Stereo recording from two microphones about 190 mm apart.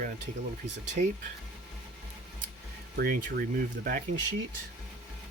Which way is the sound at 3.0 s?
55° right (ahead or behind).